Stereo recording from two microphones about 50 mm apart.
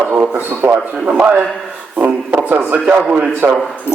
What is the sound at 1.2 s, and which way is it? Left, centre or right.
A man's voice, right.